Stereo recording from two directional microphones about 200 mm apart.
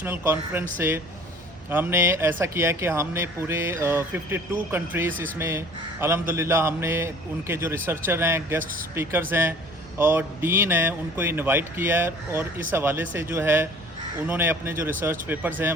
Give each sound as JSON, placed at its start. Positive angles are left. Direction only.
{"t": 0.0, "sound": "a man's voice", "side_deg": -10}